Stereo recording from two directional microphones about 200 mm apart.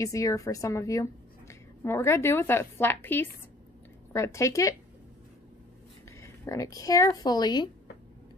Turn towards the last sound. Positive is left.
turn(degrees=20)  # may be behind; listen again after turning